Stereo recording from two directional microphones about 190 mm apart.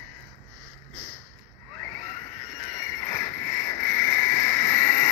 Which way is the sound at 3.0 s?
10° left (ahead or behind).